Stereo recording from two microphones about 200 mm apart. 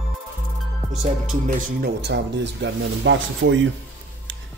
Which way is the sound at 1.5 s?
55° right (ahead or behind).